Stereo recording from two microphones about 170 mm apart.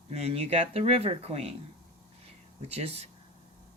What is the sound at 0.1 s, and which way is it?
Speech, 40° right (ahead or behind).